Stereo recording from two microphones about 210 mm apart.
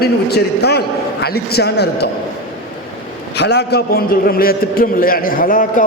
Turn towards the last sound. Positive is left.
turn(degrees=40)  # may be behind; listen again after turning